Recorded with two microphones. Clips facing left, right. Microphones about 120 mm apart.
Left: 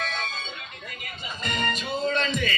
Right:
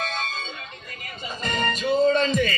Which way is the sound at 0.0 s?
40° right (ahead or behind).